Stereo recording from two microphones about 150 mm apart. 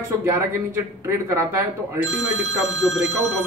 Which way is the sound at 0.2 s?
15° right (ahead or behind).